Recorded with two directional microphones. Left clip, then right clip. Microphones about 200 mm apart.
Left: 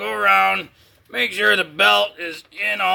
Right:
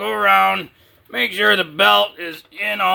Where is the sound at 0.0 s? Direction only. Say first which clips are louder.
Right 2 dB; 40° right (ahead or behind).